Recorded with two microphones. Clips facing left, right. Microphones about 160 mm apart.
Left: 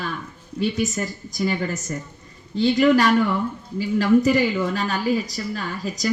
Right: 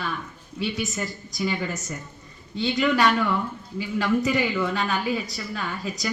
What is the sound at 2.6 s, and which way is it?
A woman's voice, 45° left (ahead or behind).